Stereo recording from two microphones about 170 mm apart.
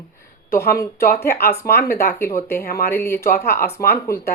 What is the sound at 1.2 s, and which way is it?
Speech, 15° left (ahead or behind).